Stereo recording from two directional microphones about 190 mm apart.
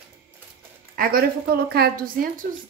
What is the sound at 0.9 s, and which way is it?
A woman's voice, 50° right (ahead or behind).